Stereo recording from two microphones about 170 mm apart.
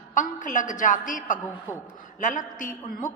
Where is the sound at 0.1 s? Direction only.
50° left (ahead or behind).